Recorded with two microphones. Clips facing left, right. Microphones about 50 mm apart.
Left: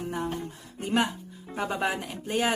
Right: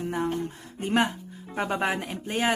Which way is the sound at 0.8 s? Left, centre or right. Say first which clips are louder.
Right 2 dB; right.